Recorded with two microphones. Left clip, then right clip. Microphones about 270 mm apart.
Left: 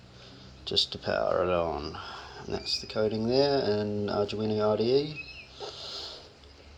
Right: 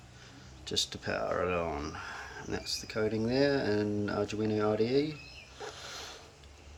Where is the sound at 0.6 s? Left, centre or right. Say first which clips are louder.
Left 5 dB; centre.